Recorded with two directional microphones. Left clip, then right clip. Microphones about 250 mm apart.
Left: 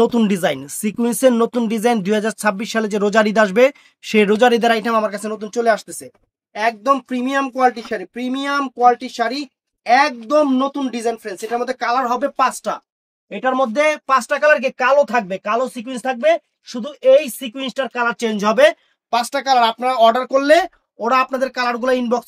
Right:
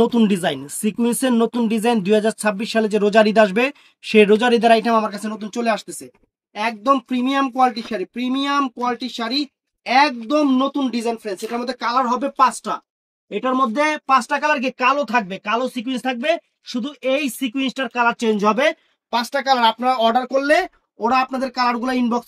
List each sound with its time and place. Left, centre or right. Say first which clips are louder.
0.0 s speech: left 2 dB; left
10.2 s speech: left 2 dB; centre; by 22.2 s left